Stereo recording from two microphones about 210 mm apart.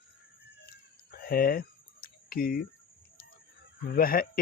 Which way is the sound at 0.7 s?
50° left (ahead or behind).